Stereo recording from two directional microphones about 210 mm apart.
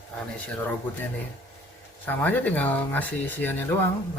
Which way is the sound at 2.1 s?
10° left (ahead or behind).